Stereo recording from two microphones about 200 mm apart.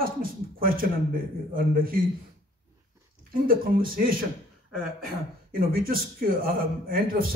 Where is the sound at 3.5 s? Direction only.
45° right (ahead or behind).